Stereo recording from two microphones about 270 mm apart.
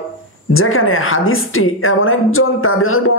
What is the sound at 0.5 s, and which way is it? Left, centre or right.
A woman's voice, left.